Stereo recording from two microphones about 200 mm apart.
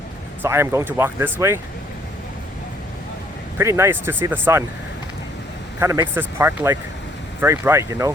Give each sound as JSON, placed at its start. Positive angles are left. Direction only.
{"t": 0.4, "sound": "speech", "side_deg": -15}
{"t": 3.6, "sound": "speech", "side_deg": -15}
{"t": 5.8, "sound": "speech", "side_deg": -15}